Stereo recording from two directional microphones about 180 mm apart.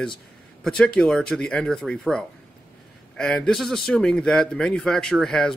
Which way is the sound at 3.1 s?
5° left (ahead or behind).